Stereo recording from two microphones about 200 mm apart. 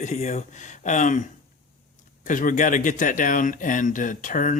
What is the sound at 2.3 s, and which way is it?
Speech, 40° left (ahead or behind).